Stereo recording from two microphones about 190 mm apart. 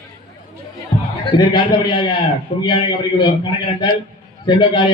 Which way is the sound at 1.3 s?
25° left (ahead or behind).